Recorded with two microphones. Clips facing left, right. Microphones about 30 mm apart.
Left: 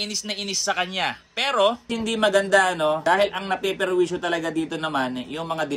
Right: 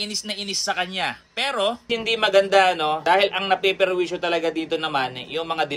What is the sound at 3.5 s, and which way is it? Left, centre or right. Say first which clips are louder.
Speech: right 5 dB; right.